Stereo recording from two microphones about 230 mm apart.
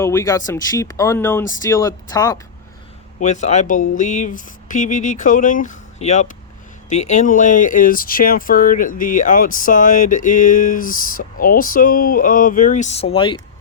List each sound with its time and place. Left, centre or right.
0.0 s speech: centre
3.2 s speech: left